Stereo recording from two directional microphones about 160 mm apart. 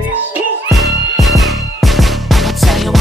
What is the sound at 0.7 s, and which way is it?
Music, centre (ahead or behind).